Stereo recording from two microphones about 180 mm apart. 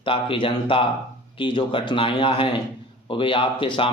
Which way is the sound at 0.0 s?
30° left (ahead or behind).